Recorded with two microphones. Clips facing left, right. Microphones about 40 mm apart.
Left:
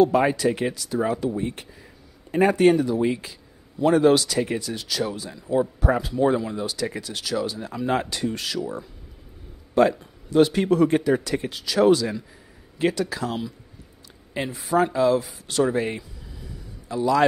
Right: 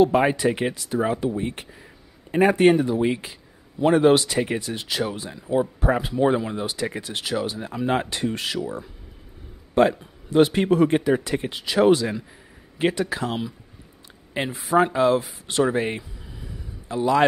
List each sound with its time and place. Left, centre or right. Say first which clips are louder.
0.0 s speech: right 1 dB; right
8.5 s speech: even; centre
9.8 s speech: even; right
15.7 s a sound: right 1 dB; right
16.8 s a man's voice: right 1 dB; right